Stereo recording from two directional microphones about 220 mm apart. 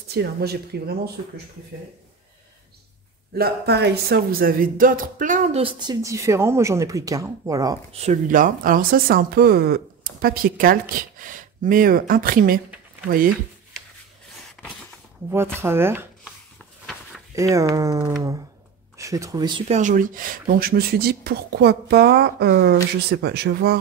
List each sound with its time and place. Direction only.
0.1 s speech: 45° right (ahead or behind)
3.3 s speech: 45° right (ahead or behind); by 7.7 s 15° right (ahead or behind)
8.0 s speech: 35° right (ahead or behind)
15.2 s speech: 10° right (ahead or behind)
17.4 s speech: 15° right (ahead or behind)
19.8 s speech: 35° right (ahead or behind)